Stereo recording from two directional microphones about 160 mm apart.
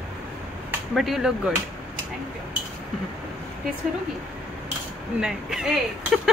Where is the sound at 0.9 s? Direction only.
Centre (ahead or behind).